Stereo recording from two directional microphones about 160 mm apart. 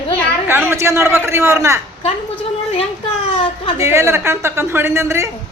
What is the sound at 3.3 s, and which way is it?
Speech, 35° left (ahead or behind).